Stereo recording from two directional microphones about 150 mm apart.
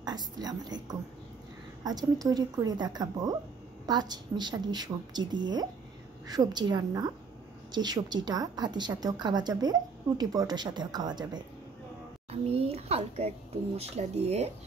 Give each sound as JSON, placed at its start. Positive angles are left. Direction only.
{"t": 0.0, "sound": "a woman's voice", "side_deg": -25}
{"t": 12.3, "sound": "a child's voice", "side_deg": -40}